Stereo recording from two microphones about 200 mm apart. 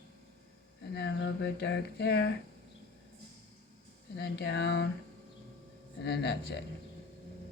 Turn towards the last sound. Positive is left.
turn(degrees=55)  # may be behind; listen again after turning